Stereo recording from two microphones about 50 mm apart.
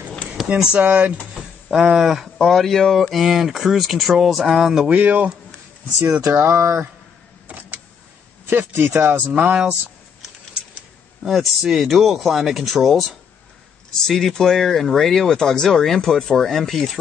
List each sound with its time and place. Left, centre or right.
0.6 s speech: centre
0.8 s speech: right
1.7 s speech: centre
2.4 s speech: centre
4.8 s speech: right
6.4 s speech: right
8.5 s speech: right
9.3 s speech: right
11.2 s speech: centre